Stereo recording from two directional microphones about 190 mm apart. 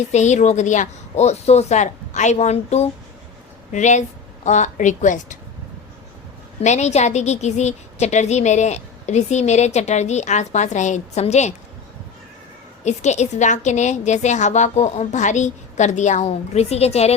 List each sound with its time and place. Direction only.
0.1 s a woman's voice: 40° left (ahead or behind)
6.6 s a woman's voice: 35° left (ahead or behind)
12.8 s a woman's voice: 35° left (ahead or behind)